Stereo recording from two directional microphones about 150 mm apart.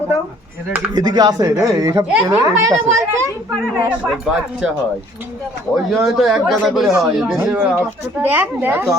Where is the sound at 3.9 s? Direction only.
5° right (ahead or behind).